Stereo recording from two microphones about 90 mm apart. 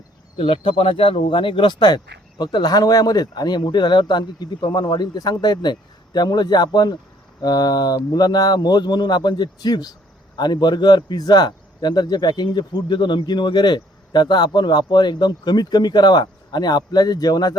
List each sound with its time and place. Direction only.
0.3 s speech: 90° left; by 17.5 s 50° left (ahead or behind)